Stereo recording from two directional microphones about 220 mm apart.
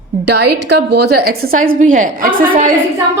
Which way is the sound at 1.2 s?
40° right (ahead or behind).